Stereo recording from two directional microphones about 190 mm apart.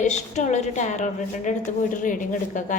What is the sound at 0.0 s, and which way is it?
A woman's voice, 40° left (ahead or behind).